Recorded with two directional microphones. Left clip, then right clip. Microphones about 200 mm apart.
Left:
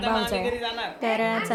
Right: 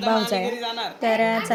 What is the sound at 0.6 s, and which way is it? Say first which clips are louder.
Speech: right 1 dB; 40° right (ahead or behind).